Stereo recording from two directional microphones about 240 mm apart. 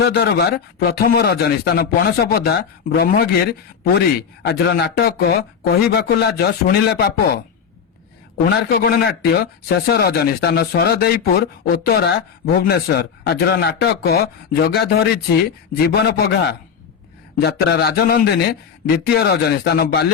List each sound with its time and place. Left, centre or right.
0.0 s speech: left
8.7 s speech: left